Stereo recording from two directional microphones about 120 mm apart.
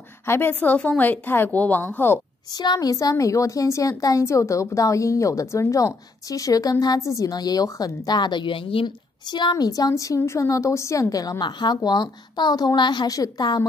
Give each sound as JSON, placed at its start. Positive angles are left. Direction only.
{"t": 0.3, "sound": "a woman's voice", "side_deg": 15}
{"t": 2.5, "sound": "a woman's voice", "side_deg": 35}